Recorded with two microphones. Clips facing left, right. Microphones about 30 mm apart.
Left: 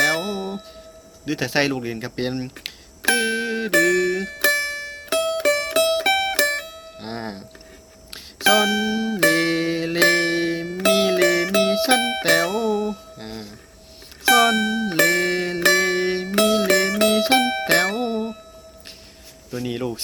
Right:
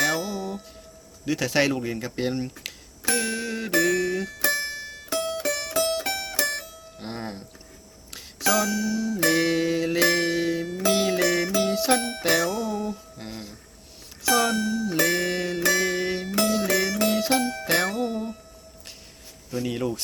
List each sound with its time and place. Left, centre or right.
0.2 s music: left
1.2 s speech: left
3.2 s music: left
3.7 s music: left
7.0 s music: left
12.5 s music: left
13.1 s a sound: left
14.3 s music: left
16.3 s music: left
19.5 s speech: centre